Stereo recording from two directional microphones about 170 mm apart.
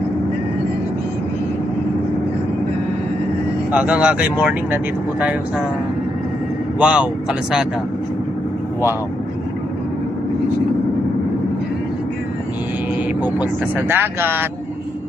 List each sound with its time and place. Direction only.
3.7 s speech: 5° right (ahead or behind)
6.7 s speech: 5° right (ahead or behind)
13.4 s speech: 10° right (ahead or behind)